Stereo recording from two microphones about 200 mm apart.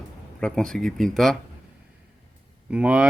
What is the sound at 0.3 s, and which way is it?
Speech, 5° left (ahead or behind).